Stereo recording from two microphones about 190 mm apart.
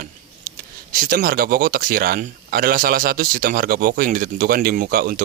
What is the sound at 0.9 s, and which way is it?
Speech, 50° right (ahead or behind).